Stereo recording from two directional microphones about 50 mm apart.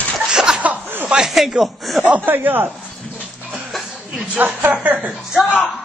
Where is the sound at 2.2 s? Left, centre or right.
Right.